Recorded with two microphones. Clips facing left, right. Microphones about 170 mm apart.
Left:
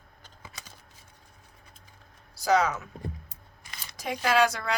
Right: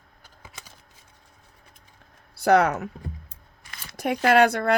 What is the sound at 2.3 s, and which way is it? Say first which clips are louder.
Speech: right 5 dB; 60° right (ahead or behind).